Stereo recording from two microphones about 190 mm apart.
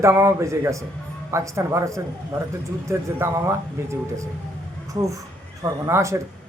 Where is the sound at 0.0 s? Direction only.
15° right (ahead or behind).